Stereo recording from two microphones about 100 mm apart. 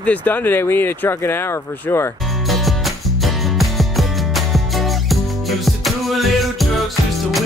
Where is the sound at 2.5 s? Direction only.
Centre (ahead or behind).